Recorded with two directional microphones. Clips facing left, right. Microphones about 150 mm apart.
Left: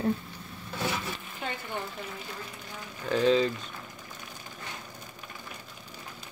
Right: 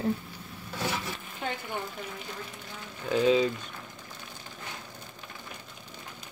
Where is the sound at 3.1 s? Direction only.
10° right (ahead or behind).